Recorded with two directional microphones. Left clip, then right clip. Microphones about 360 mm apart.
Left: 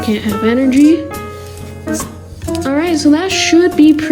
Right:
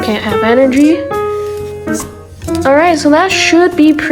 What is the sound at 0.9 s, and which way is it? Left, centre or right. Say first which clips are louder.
Music: right 3 dB; centre.